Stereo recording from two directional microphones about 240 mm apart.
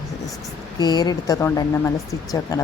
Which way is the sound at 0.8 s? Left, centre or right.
Centre.